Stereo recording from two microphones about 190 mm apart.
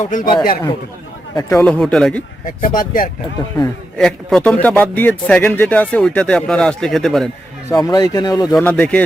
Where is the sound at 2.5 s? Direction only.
45° left (ahead or behind).